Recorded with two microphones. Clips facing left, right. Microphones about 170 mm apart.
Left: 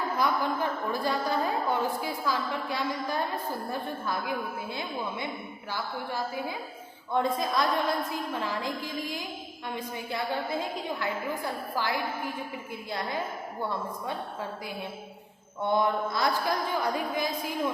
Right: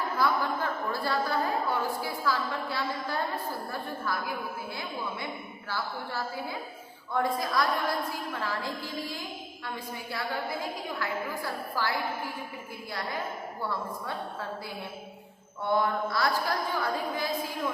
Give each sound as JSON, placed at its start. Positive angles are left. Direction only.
{"t": 0.2, "sound": "a woman's voice", "side_deg": 20}
{"t": 15.6, "sound": "a woman's voice", "side_deg": 20}